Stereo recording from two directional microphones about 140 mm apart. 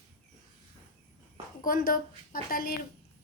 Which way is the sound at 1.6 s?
80° left.